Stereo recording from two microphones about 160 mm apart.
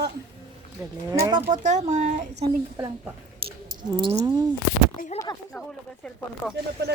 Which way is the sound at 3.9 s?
30° right (ahead or behind).